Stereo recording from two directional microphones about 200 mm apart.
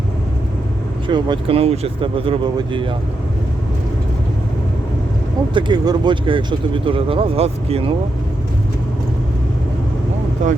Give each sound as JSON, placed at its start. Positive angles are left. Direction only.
{"t": 1.0, "sound": "speech", "side_deg": -25}
{"t": 5.5, "sound": "speech", "side_deg": -20}
{"t": 10.4, "sound": "speech", "side_deg": -40}